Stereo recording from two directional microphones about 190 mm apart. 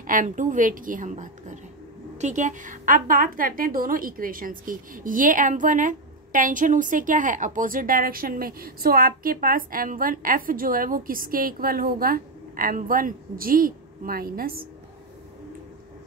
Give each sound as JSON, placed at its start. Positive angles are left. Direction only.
{"t": 0.0, "sound": "a woman's voice", "side_deg": -45}